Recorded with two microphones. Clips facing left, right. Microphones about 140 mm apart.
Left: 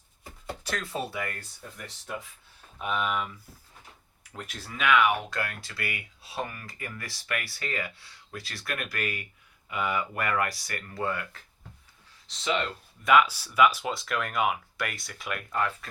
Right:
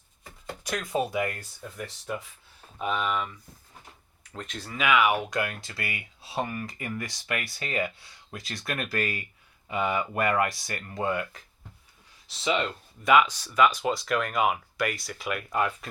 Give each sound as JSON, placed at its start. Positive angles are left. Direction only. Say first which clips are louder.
{"t": 0.6, "sound": "speech", "louder": "right 5 dB", "side_deg": -15}
{"t": 2.8, "sound": "speech", "louder": "right 1 dB", "side_deg": 0}
{"t": 12.3, "sound": "speech", "louder": "right 1 dB", "side_deg": -10}
{"t": 13.1, "sound": "speech", "louder": "right 1 dB", "side_deg": 5}
{"t": 15.4, "sound": "speech", "louder": "right 1 dB", "side_deg": -15}